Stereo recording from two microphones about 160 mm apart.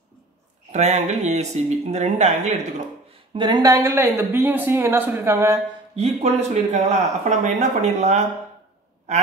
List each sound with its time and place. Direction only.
0.7 s speech: 45° right (ahead or behind)
3.3 s speech: 25° right (ahead or behind)
5.9 s speech: 40° right (ahead or behind)